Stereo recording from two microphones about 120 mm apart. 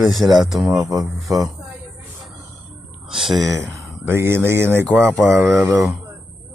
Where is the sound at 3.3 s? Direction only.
30° right (ahead or behind).